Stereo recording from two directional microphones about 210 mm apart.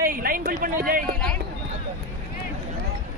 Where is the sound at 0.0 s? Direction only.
40° right (ahead or behind).